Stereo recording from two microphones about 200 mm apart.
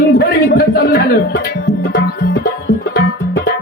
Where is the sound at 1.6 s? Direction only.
55° left (ahead or behind).